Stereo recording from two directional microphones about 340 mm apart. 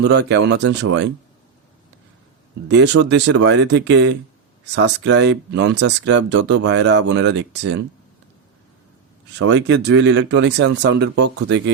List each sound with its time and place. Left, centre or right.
0.0 s speech: right
2.6 s speech: right
9.4 s speech: right